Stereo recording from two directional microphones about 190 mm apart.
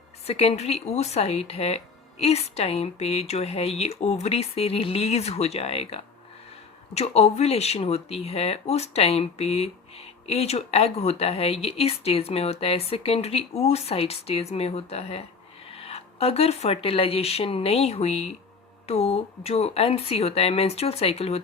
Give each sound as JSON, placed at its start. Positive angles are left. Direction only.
{"t": 0.3, "sound": "speech", "side_deg": 35}